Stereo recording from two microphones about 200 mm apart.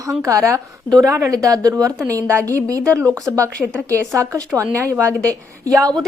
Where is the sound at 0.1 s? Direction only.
15° right (ahead or behind).